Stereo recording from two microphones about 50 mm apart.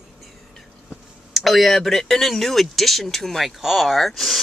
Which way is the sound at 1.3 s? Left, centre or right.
Centre.